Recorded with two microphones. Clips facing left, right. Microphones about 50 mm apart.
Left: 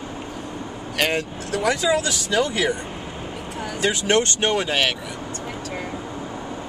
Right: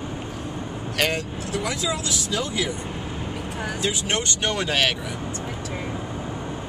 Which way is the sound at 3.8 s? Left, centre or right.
Left.